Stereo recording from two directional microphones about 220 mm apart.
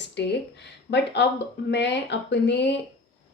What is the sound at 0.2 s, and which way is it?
A woman's voice, 50° left (ahead or behind).